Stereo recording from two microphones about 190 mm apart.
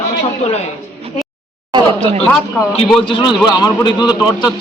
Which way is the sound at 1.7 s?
25° right (ahead or behind).